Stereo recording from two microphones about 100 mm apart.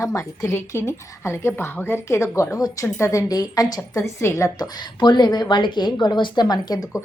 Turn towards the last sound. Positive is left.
turn(degrees=45)  # may be behind; listen again after turning